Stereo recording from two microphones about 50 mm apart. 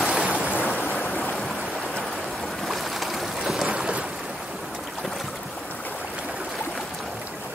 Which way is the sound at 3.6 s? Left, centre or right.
Right.